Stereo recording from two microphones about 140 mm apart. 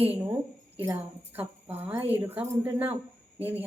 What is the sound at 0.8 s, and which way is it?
A woman's voice, 15° right (ahead or behind).